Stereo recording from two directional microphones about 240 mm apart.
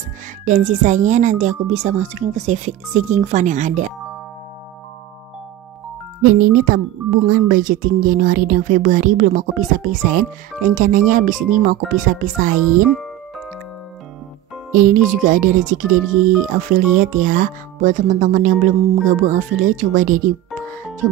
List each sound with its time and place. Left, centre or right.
0.5 s speech: right
6.2 s speech: right
14.7 s speech: right